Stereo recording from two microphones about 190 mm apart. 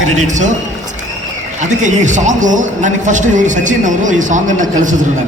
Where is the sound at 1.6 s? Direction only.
40° right (ahead or behind).